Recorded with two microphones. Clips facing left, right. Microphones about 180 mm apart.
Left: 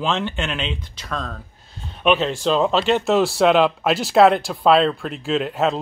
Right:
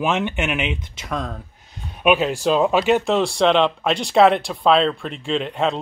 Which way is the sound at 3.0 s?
5° left (ahead or behind).